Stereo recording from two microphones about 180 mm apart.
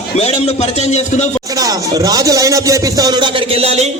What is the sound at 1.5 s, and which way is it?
Speech, 20° right (ahead or behind).